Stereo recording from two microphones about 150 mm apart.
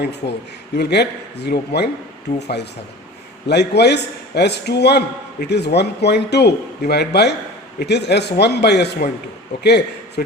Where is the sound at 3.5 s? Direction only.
90° left.